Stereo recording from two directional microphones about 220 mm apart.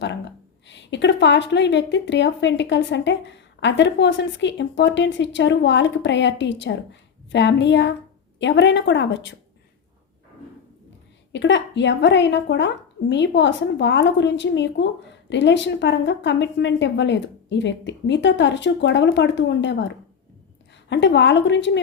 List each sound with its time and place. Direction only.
0.7 s a woman's voice: 55° left (ahead or behind)
11.3 s a woman's voice: 55° left (ahead or behind)
20.9 s a woman's voice: 55° left (ahead or behind)